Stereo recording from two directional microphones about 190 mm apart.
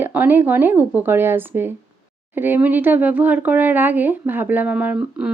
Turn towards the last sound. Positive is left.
turn(degrees=-5)  # may be behind; listen again after turning